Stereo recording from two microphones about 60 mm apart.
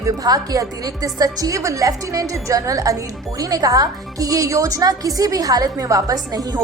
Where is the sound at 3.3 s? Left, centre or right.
Right.